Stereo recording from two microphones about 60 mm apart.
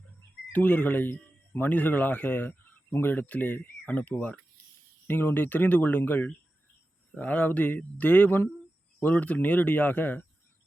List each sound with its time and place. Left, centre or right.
0.5 s speech: left